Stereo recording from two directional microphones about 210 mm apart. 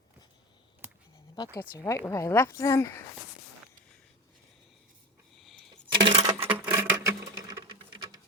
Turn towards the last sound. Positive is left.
turn(degrees=-20)  # may be behind; listen again after turning